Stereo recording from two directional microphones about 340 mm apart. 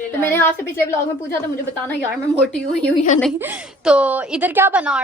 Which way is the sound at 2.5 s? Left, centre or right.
Centre.